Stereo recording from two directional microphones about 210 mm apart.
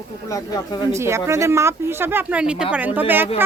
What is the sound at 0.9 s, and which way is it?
A woman's voice, 15° right (ahead or behind).